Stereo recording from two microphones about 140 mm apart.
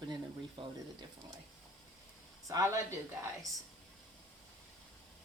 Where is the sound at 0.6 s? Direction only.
40° right (ahead or behind).